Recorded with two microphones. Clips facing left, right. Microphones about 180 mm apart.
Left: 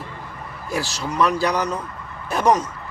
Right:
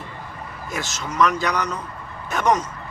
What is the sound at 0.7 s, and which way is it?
Speech, 35° left (ahead or behind).